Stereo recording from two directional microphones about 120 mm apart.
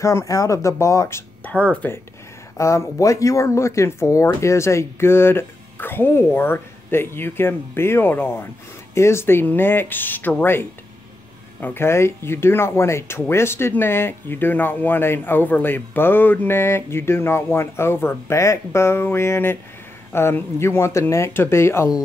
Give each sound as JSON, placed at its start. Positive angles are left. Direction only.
{"t": 0.0, "sound": "speech", "side_deg": 25}